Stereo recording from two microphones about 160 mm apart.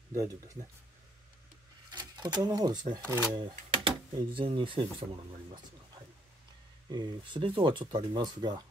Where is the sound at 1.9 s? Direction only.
25° right (ahead or behind).